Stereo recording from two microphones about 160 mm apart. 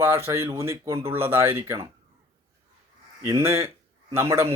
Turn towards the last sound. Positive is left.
turn(degrees=-15)  # may be behind; listen again after turning